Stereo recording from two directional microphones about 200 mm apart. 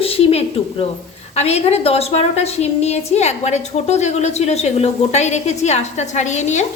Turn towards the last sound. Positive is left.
turn(degrees=35)  # may be behind; listen again after turning